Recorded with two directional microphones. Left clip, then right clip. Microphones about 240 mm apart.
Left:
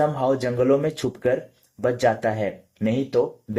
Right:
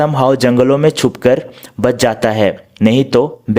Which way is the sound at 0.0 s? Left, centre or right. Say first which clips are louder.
Right 10 dB; right.